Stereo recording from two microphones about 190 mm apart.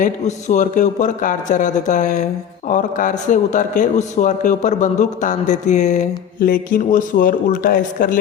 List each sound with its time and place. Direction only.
0.0 s a man's voice: 40° left (ahead or behind)
6.4 s speech: 50° left (ahead or behind)